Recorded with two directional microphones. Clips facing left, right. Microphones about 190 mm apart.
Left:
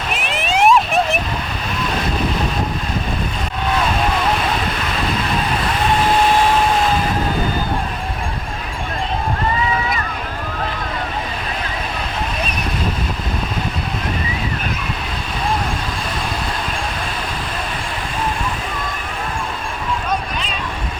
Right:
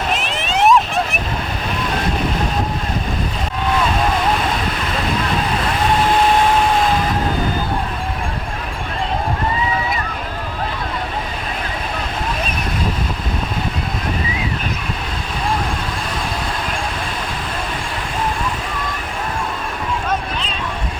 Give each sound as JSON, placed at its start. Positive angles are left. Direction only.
{"t": 0.5, "sound": "vehicle", "side_deg": 10}